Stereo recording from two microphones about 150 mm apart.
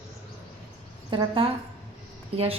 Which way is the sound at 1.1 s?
35° right (ahead or behind).